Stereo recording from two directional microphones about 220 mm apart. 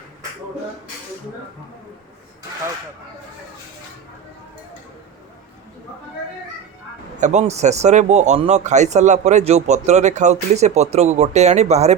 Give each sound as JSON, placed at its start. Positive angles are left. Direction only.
{"t": 7.2, "sound": "speech", "side_deg": -30}